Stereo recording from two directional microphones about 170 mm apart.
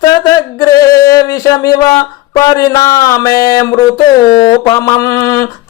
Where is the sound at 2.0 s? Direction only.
20° left (ahead or behind).